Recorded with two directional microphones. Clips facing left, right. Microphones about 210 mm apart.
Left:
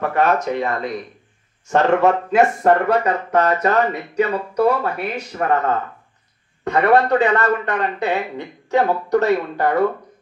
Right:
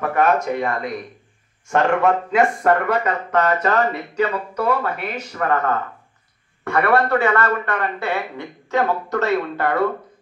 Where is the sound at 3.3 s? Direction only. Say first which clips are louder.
Left 1 dB; 25° left (ahead or behind).